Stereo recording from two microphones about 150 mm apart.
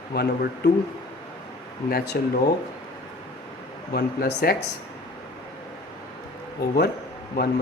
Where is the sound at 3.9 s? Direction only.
90° left.